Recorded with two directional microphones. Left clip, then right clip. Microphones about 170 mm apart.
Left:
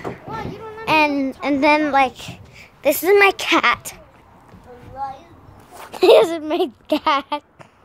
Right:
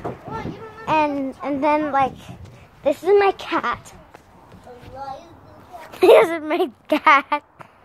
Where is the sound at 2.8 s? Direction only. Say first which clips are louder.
Left 3 dB; 60° left (ahead or behind).